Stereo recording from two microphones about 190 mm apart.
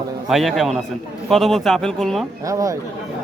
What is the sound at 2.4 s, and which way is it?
Speech, 15° right (ahead or behind).